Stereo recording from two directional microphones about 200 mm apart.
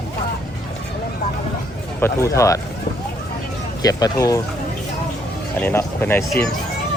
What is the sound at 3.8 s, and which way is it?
Speech, 20° left (ahead or behind).